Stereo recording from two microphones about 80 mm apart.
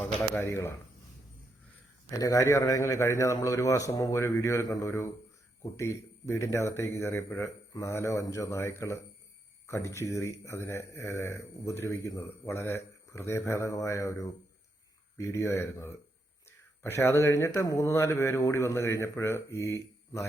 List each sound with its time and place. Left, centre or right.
0.2 s speech: left
2.0 s speech: left